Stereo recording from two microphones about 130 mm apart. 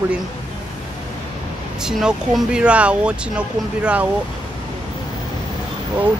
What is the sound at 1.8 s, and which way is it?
Speech, 5° right (ahead or behind).